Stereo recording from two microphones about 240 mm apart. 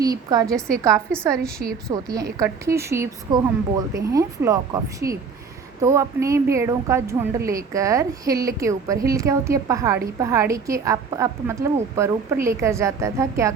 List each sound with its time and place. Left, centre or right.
0.0 s a woman's voice: centre
0.4 s a woman's voice: centre
0.9 s a woman's voice: centre